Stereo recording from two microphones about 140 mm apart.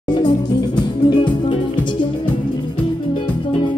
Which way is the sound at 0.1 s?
30° left (ahead or behind).